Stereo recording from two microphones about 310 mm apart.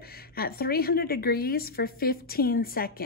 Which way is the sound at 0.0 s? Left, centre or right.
Left.